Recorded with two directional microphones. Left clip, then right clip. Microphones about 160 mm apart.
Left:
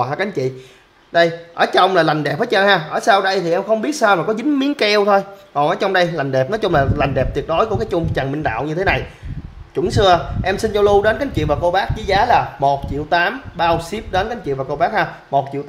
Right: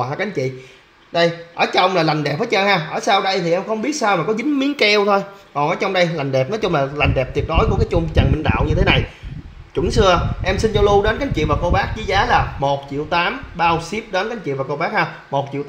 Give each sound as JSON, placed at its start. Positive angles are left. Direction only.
{"t": 0.0, "sound": "speech", "side_deg": 15}